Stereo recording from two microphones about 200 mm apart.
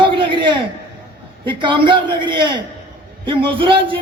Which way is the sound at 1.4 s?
25° right (ahead or behind).